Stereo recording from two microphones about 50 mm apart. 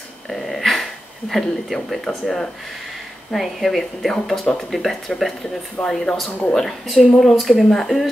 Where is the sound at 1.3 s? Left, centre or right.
Centre.